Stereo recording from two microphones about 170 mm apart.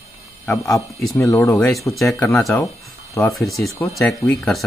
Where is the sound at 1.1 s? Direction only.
15° left (ahead or behind).